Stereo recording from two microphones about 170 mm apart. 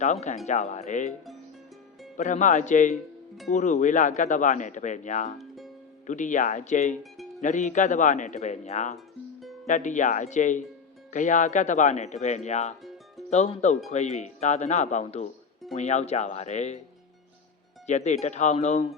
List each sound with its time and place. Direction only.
0.0 s speech: 45° left (ahead or behind)
2.1 s speech: 45° left (ahead or behind)
2.9 s speech: centre (ahead or behind)
3.5 s speech: 45° left (ahead or behind)
5.4 s music: centre (ahead or behind)
6.1 s speech: 45° left (ahead or behind)
6.9 s speech: centre (ahead or behind)
7.4 s speech: 45° left (ahead or behind)
17.8 s speech: 45° left (ahead or behind)